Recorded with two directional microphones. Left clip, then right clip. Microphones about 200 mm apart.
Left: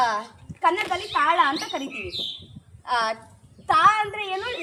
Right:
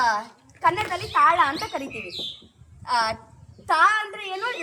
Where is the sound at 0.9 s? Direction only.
45° right (ahead or behind).